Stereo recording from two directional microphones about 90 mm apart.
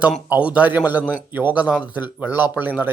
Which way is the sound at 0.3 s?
15° right (ahead or behind).